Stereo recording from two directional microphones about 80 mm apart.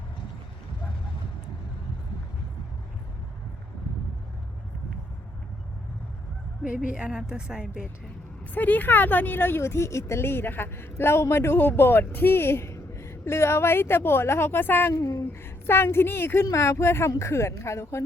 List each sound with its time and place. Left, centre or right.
6.7 s a woman's voice: centre
8.5 s speech: left
14.9 s a sound: left
15.3 s a woman's voice: left